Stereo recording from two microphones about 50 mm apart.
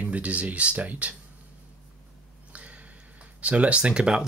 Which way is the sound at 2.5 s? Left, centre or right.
Right.